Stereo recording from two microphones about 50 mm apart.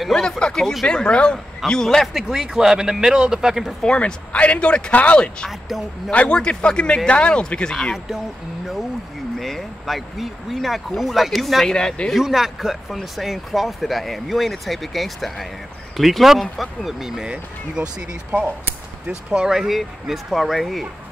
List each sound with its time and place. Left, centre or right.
0.4 s speech: centre
2.1 s speech: centre
3.8 s speech: left
9.4 s speech: centre
11.7 s speech: centre
12.1 s speech: centre
19.0 s speech: centre